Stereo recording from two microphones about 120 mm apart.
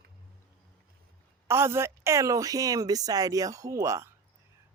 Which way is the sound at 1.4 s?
20° right (ahead or behind).